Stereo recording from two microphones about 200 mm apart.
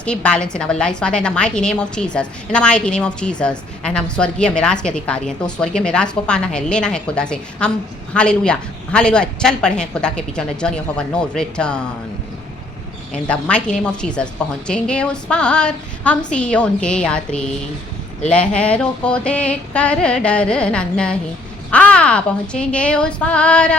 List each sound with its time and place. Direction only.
0.0 s a woman's voice: 5° left (ahead or behind)
13.2 s a woman's voice: 5° left (ahead or behind)